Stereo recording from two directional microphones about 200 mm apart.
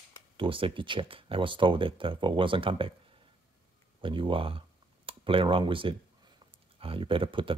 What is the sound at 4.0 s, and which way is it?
Speech, 25° right (ahead or behind).